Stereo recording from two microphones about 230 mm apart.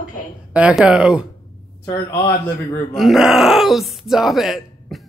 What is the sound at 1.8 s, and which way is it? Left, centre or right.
Speech, centre.